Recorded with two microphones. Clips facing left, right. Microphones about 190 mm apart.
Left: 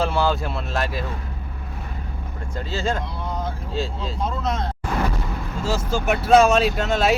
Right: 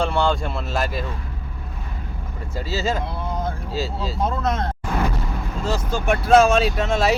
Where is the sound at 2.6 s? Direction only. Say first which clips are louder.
Right 1 dB; 5° right (ahead or behind).